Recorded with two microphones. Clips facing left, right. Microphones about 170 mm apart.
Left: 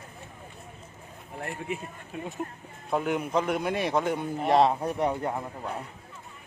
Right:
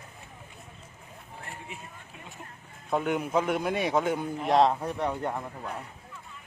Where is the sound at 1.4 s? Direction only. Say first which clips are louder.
Left 10 dB; 60° left (ahead or behind).